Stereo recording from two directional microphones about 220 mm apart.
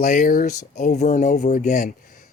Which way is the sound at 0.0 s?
35° left (ahead or behind).